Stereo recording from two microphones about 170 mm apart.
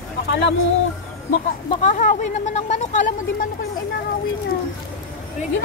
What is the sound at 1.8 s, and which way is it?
Speech, 50° left (ahead or behind).